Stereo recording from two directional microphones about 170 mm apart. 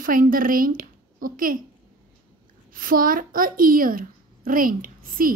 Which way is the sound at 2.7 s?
55° right (ahead or behind).